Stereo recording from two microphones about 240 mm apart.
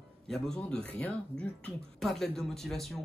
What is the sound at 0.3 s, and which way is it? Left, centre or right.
Speech, centre.